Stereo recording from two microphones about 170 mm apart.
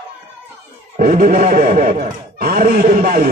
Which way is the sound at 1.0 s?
50° right (ahead or behind).